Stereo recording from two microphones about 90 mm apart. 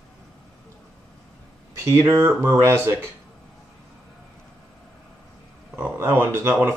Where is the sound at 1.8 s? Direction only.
30° right (ahead or behind).